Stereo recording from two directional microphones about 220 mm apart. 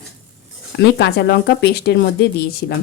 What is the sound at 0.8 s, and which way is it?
Speech, 50° left (ahead or behind).